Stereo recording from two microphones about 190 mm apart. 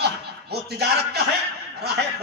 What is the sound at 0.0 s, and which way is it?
Chuckle, 60° right (ahead or behind).